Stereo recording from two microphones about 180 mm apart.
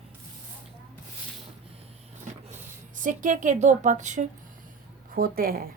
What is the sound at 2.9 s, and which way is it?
A woman's voice, 45° right (ahead or behind).